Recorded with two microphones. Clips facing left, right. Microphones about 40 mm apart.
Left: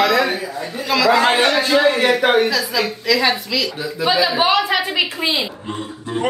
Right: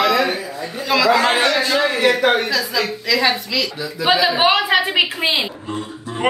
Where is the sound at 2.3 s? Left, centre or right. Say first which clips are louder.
Left 3 dB; centre.